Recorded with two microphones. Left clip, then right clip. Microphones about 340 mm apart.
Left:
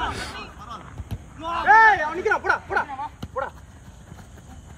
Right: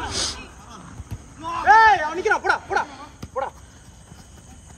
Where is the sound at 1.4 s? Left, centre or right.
Centre.